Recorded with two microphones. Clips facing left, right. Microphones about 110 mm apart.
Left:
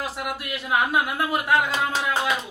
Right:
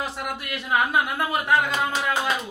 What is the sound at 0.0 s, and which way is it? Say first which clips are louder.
Speech: even; 5° left (ahead or behind).